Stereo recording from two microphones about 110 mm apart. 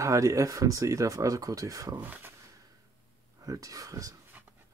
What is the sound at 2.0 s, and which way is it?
Speech, 15° right (ahead or behind).